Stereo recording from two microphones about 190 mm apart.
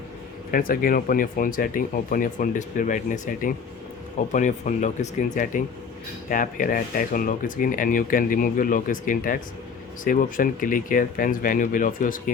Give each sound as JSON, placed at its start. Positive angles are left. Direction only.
{"t": 0.5, "sound": "speech", "side_deg": 50}